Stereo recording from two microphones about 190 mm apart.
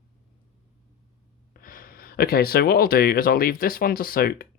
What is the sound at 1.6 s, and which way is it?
Speech, 50° left (ahead or behind).